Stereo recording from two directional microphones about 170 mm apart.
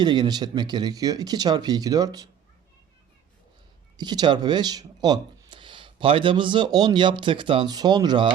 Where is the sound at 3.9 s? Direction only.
25° right (ahead or behind).